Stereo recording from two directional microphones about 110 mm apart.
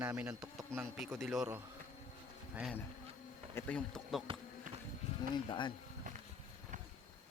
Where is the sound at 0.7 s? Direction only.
10° left (ahead or behind).